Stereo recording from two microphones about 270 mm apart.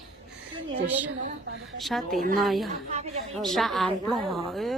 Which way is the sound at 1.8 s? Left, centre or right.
Centre.